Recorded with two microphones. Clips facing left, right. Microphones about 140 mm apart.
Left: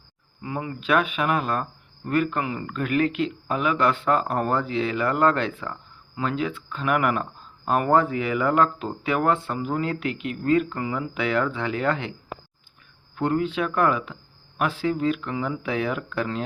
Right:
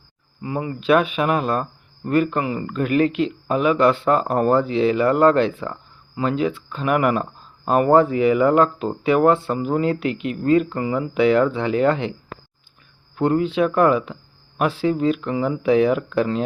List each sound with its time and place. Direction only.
0.4 s speech: 20° right (ahead or behind)
0.8 s speech: 30° right (ahead or behind)
13.1 s speech: 25° right (ahead or behind)